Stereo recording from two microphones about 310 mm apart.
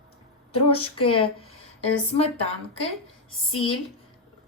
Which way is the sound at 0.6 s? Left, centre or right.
Centre.